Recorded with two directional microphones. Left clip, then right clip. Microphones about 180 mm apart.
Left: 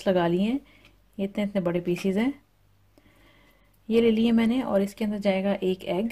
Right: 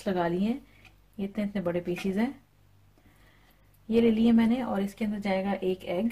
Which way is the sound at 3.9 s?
50° left (ahead or behind).